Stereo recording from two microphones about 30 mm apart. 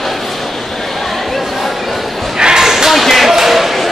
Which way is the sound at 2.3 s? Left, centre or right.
Right.